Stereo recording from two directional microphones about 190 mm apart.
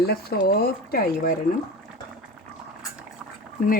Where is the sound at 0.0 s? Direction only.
55° left (ahead or behind).